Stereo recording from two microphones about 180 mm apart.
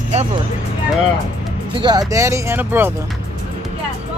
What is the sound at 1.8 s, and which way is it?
Speech, 20° right (ahead or behind).